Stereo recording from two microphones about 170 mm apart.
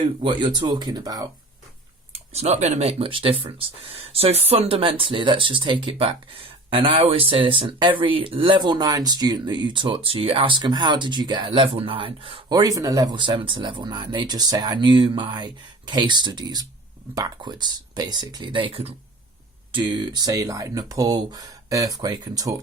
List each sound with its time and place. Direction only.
0.0 s speech: 25° right (ahead or behind)
2.3 s speech: 40° right (ahead or behind); by 22.5 s 25° right (ahead or behind)